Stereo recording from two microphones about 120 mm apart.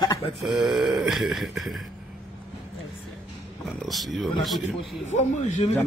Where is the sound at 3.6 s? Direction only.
Centre (ahead or behind).